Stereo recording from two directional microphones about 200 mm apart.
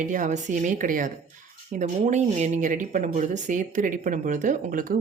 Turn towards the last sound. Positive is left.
turn(degrees=-45)  # may be behind; listen again after turning